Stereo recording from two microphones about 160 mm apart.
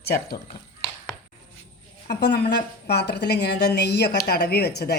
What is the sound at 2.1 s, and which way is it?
A woman's voice, 90° left.